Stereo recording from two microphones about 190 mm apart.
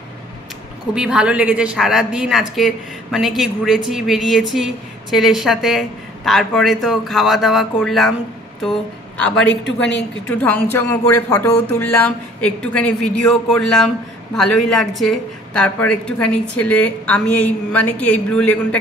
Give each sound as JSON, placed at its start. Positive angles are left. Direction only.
{"t": 0.9, "sound": "speech", "side_deg": -5}
{"t": 9.7, "sound": "a woman's voice", "side_deg": 70}
{"t": 10.3, "sound": "a woman's voice", "side_deg": 10}